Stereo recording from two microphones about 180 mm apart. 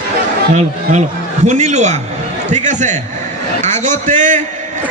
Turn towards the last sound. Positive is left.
turn(degrees=-45)  # may be behind; listen again after turning